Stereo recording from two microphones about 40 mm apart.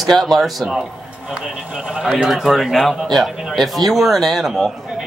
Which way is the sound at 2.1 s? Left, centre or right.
Centre.